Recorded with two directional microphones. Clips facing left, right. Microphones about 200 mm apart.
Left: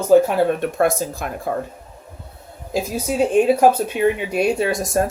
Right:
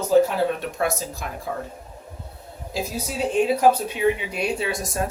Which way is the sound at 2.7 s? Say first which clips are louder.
Left 7 dB; 50° left (ahead or behind).